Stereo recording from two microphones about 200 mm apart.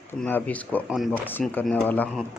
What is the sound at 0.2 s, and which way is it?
Speech, 5° left (ahead or behind).